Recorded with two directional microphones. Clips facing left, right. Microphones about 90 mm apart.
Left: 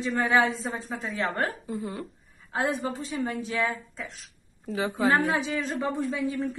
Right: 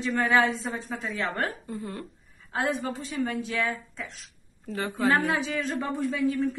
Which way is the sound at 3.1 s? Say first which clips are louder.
Right 2 dB; 15° left (ahead or behind).